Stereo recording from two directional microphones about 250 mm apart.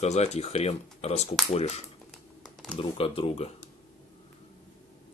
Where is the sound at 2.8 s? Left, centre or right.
Left.